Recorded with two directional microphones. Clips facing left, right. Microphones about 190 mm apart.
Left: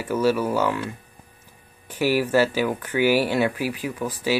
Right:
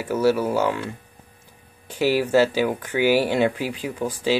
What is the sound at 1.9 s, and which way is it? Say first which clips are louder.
Speech: right 1 dB; 15° right (ahead or behind).